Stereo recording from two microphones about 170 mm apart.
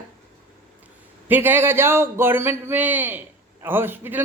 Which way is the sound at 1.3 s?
10° right (ahead or behind).